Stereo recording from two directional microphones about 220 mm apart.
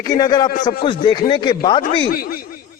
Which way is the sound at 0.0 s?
20° left (ahead or behind).